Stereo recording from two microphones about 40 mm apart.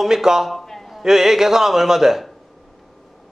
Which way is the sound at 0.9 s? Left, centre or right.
Centre.